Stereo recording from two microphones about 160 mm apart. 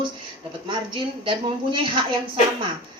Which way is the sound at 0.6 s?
30° right (ahead or behind).